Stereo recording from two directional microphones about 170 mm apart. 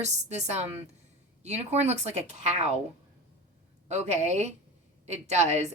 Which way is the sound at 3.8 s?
40° right (ahead or behind).